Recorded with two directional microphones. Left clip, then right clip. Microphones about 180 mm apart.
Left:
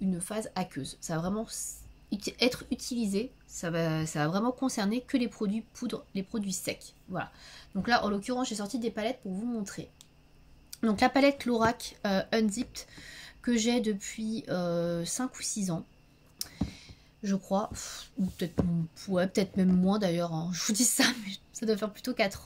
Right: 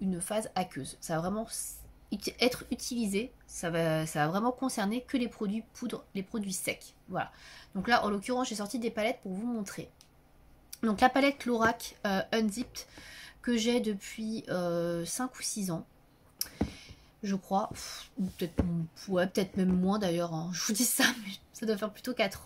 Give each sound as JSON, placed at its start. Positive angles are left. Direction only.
{"t": 0.0, "sound": "speech", "side_deg": 15}
{"t": 16.3, "sound": "a sound", "side_deg": 20}
{"t": 18.9, "sound": "speech", "side_deg": 20}